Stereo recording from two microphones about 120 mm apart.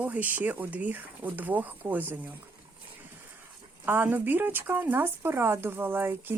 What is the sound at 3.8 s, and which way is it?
Speech, 15° right (ahead or behind).